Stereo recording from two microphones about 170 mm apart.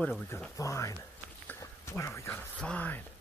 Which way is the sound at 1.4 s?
15° left (ahead or behind).